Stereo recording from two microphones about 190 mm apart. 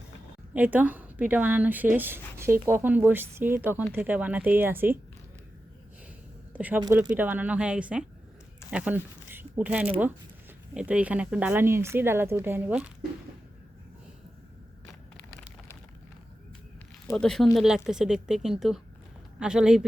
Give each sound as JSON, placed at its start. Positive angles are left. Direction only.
{"t": 0.5, "sound": "a woman's voice", "side_deg": -10}
{"t": 6.5, "sound": "a woman's voice", "side_deg": -10}
{"t": 15.2, "sound": "a sound", "side_deg": 10}
{"t": 17.2, "sound": "speech", "side_deg": 5}